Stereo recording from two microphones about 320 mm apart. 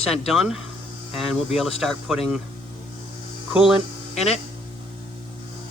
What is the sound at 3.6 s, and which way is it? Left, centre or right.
Speech, centre.